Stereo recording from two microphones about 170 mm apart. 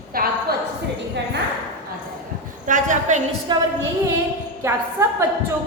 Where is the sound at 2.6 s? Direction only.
50° right (ahead or behind).